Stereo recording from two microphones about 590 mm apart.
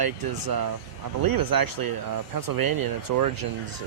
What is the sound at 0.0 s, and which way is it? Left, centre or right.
Speech, right.